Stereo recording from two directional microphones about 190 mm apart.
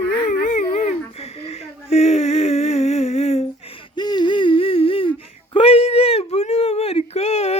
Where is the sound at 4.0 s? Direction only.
20° left (ahead or behind).